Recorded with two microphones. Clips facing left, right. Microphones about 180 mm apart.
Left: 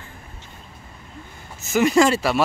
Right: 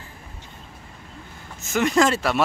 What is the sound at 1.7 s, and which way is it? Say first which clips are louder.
Speech: left 3 dB; 5° left (ahead or behind).